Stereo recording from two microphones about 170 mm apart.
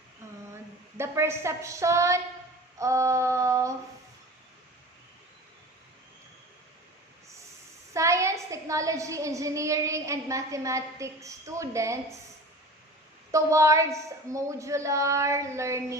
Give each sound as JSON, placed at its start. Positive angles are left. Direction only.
{"t": 0.5, "sound": "a woman's voice", "side_deg": -15}
{"t": 7.9, "sound": "a woman's voice", "side_deg": -20}
{"t": 13.3, "sound": "a woman's voice", "side_deg": -20}